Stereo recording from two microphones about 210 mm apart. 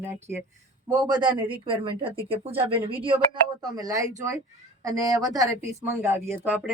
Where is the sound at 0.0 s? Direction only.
10° right (ahead or behind).